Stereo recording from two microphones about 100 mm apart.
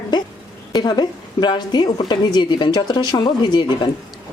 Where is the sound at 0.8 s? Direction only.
45° left (ahead or behind).